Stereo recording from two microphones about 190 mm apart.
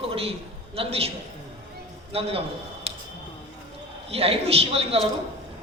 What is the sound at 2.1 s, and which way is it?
Speech, 30° right (ahead or behind).